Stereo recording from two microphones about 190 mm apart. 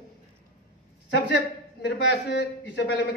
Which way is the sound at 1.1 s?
65° left (ahead or behind).